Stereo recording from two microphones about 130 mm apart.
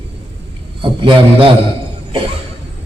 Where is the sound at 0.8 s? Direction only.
40° right (ahead or behind).